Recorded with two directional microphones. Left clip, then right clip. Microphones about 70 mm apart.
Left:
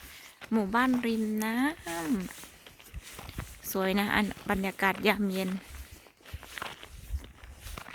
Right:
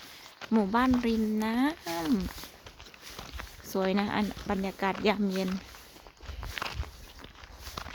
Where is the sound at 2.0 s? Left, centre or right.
Centre.